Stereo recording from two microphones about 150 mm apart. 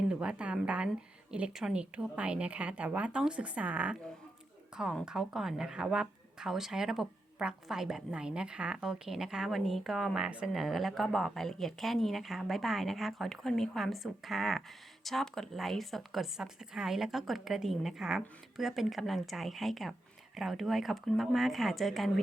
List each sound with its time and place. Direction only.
0.1 s a woman's voice: 5° right (ahead or behind)